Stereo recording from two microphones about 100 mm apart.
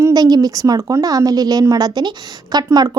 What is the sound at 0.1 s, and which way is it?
A woman's voice, 40° right (ahead or behind).